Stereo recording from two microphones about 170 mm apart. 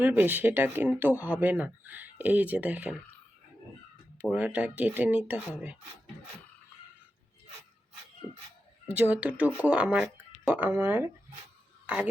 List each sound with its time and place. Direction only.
0.0 s speech: 10° right (ahead or behind)
4.2 s speech: 5° right (ahead or behind)
8.2 s speech: 15° left (ahead or behind)
8.9 s speech: 10° right (ahead or behind)